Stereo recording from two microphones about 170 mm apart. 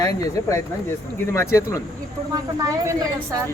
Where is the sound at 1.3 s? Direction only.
15° left (ahead or behind).